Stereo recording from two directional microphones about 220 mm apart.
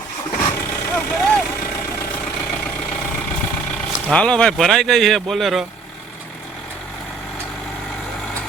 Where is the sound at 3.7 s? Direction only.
5° left (ahead or behind).